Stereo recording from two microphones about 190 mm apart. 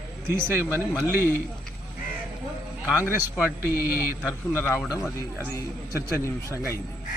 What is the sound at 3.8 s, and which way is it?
Speech, 10° right (ahead or behind).